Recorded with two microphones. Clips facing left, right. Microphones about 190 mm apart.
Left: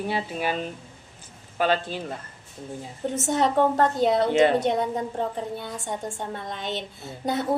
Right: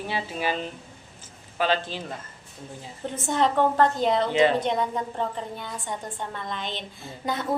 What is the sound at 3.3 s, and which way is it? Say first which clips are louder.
Speech: left 1 dB; 45° left (ahead or behind).